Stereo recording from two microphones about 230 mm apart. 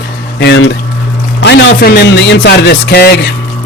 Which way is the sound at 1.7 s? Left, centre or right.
Left.